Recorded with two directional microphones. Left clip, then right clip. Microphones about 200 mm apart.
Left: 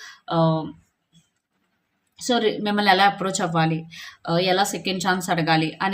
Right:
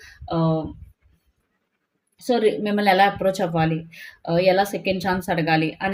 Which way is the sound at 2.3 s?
25° left (ahead or behind).